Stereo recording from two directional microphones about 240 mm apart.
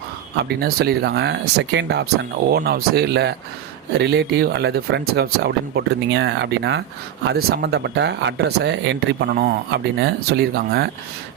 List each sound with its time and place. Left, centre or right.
0.4 s speech: right